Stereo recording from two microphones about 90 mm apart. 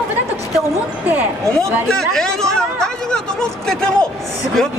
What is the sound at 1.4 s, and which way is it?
A man's voice, 5° left (ahead or behind).